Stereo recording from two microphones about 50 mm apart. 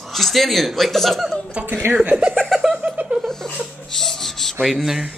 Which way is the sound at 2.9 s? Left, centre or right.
Right.